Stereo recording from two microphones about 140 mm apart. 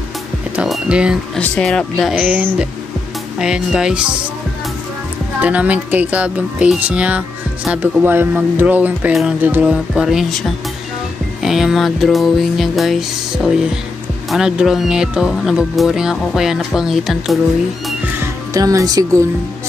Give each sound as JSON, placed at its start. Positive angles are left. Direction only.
{"t": 0.6, "sound": "speech", "side_deg": -5}
{"t": 1.4, "sound": "speech", "side_deg": 5}
{"t": 5.4, "sound": "speech", "side_deg": -10}
{"t": 11.4, "sound": "speech", "side_deg": 0}
{"t": 18.2, "sound": "speech", "side_deg": -25}